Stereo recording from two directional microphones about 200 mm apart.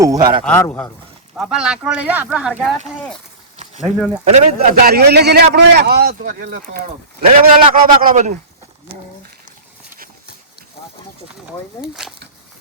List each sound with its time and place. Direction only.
0.0 s a man's voice: 20° right (ahead or behind)
0.4 s a man's voice: 5° left (ahead or behind)
1.4 s speech: 5° right (ahead or behind)
4.3 s a man's voice: 40° right (ahead or behind)
6.6 s a man's voice: 40° right (ahead or behind)
12.0 s speech: 5° right (ahead or behind)